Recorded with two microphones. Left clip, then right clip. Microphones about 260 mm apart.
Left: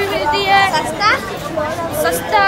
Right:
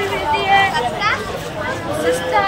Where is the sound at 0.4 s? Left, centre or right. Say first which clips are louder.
Left 1 dB; centre.